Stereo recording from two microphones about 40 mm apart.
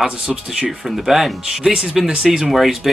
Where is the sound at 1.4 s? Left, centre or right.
Centre.